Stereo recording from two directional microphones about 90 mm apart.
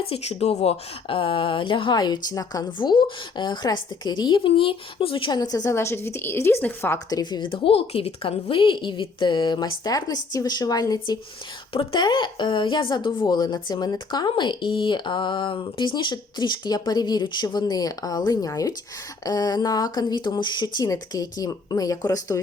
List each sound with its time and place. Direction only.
0.4 s speech: 90° left
1.0 s speech: 80° left; by 2.2 s 55° left (ahead or behind)
2.3 s speech: 40° left (ahead or behind)
2.6 s speech: 60° left (ahead or behind)
5.3 s speech: 45° left (ahead or behind)
5.7 s a woman's voice: 30° left (ahead or behind)
7.1 s speech: 55° left (ahead or behind)
11.7 s speech: 90° left
11.9 s speech: 55° left (ahead or behind)
20.8 s speech: 45° left (ahead or behind)